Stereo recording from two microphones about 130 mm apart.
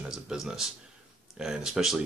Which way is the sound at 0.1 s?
5° right (ahead or behind).